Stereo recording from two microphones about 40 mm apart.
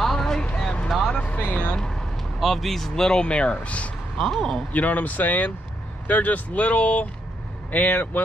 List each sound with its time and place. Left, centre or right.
0.0 s a sound: centre
0.8 s vehicle: centre
1.2 s speech: left
1.8 s vehicle: centre
2.4 s speech: centre
3.1 s speech: left
4.2 s speech: centre
4.7 s speech: left